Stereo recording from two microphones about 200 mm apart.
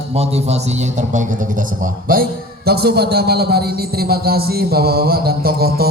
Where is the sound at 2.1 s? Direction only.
50° right (ahead or behind).